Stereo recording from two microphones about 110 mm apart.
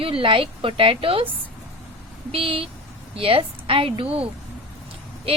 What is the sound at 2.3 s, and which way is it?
Speech, 55° right (ahead or behind).